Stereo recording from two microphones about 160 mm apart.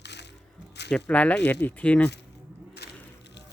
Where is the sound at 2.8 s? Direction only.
90° left.